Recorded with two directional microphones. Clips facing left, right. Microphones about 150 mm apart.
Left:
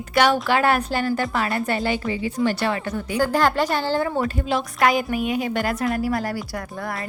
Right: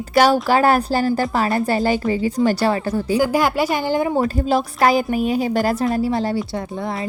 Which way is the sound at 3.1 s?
10° right (ahead or behind).